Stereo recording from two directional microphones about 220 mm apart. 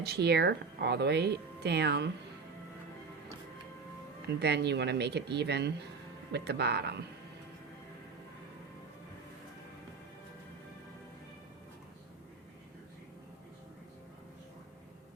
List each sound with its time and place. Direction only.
0.0 s speech: 50° right (ahead or behind)
4.4 s speech: 50° right (ahead or behind)